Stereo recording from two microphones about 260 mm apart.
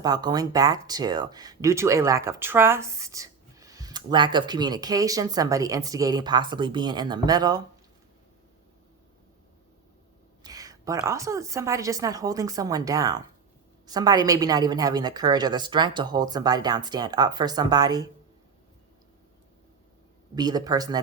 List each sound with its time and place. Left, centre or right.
0.0 s speech: centre
10.4 s speech: centre
20.3 s speech: centre